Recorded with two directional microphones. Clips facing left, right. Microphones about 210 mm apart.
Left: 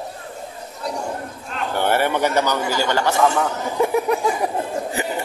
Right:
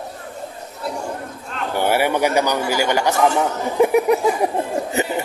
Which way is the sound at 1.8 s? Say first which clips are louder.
Right 1 dB; 10° right (ahead or behind).